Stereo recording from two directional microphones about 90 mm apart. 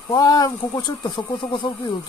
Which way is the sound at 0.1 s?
45° left (ahead or behind).